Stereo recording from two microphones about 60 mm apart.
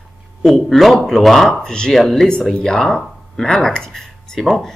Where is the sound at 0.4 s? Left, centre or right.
Centre.